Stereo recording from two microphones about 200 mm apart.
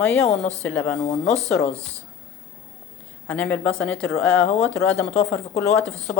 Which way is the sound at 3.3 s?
5° left (ahead or behind).